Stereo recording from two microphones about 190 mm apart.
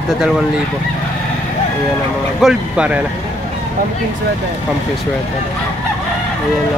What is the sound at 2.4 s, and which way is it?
Speech, 5° right (ahead or behind).